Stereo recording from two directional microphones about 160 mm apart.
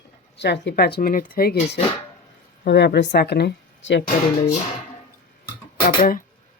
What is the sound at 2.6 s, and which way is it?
Speech, 90° left.